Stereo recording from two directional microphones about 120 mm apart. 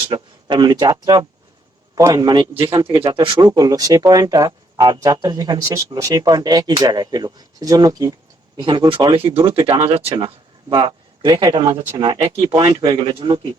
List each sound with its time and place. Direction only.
0.1 s speech: 35° right (ahead or behind)
2.7 s speech: 30° right (ahead or behind)
3.0 s speech: 40° right (ahead or behind)
10.2 s speech: 40° right (ahead or behind)
11.9 s speech: 45° right (ahead or behind)